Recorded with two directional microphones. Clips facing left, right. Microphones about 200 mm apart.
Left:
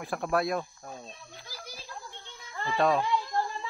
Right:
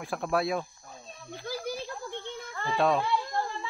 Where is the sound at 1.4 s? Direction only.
55° right (ahead or behind).